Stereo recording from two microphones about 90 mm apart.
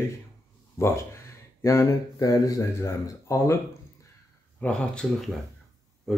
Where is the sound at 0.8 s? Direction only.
30° left (ahead or behind).